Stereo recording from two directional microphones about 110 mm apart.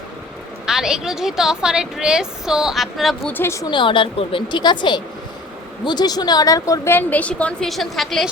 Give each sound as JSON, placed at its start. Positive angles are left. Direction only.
{"t": 0.6, "sound": "a woman's voice", "side_deg": -5}
{"t": 3.2, "sound": "a woman's voice", "side_deg": 20}
{"t": 3.7, "sound": "a woman's voice", "side_deg": 50}
{"t": 6.9, "sound": "a woman's voice", "side_deg": 15}